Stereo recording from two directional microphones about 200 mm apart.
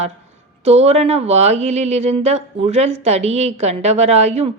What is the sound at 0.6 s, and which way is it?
A woman's voice, 30° right (ahead or behind).